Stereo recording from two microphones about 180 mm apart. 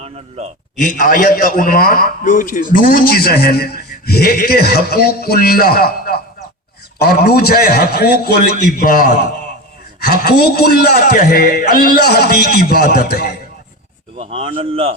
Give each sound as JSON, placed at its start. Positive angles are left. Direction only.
{"t": 0.0, "sound": "a man's voice", "side_deg": -40}
{"t": 0.8, "sound": "a man's voice", "side_deg": 45}
{"t": 10.2, "sound": "a man's voice", "side_deg": 60}
{"t": 14.2, "sound": "a man's voice", "side_deg": -30}